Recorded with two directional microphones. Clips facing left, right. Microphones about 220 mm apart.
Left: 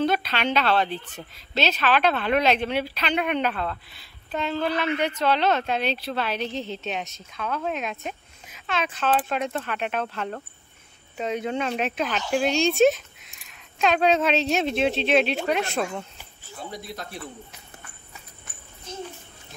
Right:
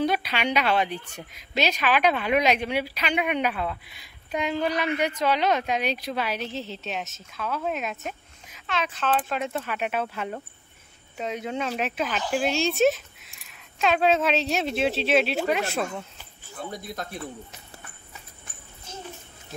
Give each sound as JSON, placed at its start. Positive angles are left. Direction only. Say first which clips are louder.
{"t": 0.0, "sound": "a woman's voice", "louder": "left 1 dB", "side_deg": -10}
{"t": 9.3, "sound": "a woman's voice", "louder": "left 1 dB", "side_deg": -5}
{"t": 16.7, "sound": "a man's voice", "louder": "left 1 dB", "side_deg": -50}